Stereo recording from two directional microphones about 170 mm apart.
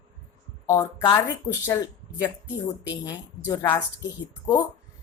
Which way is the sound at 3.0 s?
20° left (ahead or behind).